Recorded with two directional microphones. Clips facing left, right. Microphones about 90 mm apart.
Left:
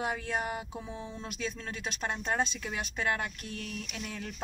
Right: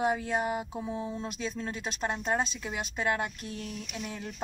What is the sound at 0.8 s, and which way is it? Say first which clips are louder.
Speech: right 6 dB; 10° right (ahead or behind).